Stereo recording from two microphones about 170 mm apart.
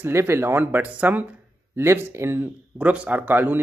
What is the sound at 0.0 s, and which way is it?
Speech, 15° right (ahead or behind).